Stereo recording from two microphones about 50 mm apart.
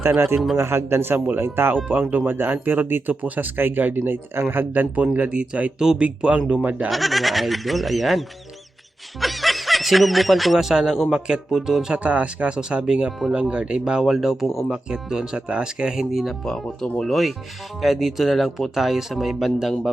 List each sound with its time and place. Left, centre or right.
0.0 s speech: right
1.7 s speech: right
5.1 s speech: right
6.8 s speech: centre
9.2 s speech: centre
11.9 s speech: right
14.0 s speech: centre
16.5 s speech: centre